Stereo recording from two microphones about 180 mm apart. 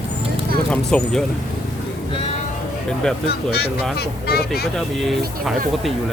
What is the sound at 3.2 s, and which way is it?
Speech, 65° left (ahead or behind).